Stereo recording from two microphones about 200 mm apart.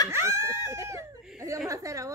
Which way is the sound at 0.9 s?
15° right (ahead or behind).